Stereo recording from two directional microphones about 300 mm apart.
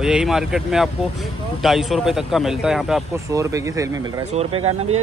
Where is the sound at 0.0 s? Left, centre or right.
Centre; by 4.6 s right.